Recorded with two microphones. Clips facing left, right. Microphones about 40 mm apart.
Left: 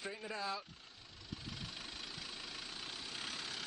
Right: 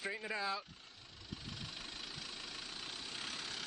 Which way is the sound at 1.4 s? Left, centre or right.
Centre.